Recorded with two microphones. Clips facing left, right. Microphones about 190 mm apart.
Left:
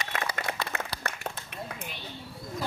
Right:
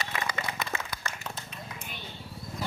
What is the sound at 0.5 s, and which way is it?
Applause, 60° left (ahead or behind).